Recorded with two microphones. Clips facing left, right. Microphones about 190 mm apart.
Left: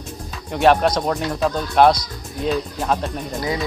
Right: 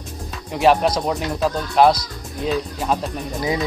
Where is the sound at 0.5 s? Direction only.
Centre (ahead or behind).